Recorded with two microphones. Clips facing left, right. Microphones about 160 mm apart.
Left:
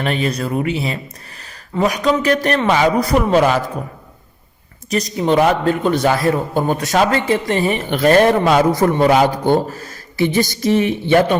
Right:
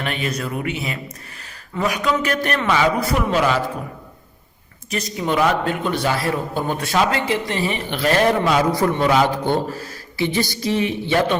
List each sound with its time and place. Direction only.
0.0 s a man's voice: 35° left (ahead or behind)
4.9 s a man's voice: 40° left (ahead or behind)